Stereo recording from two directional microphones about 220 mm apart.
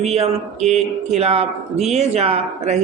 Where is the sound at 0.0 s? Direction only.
30° right (ahead or behind).